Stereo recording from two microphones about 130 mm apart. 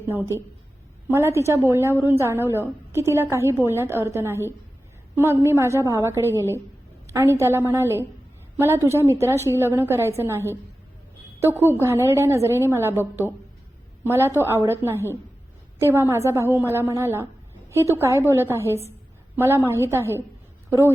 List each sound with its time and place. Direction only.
0.1 s a woman's voice: 20° right (ahead or behind)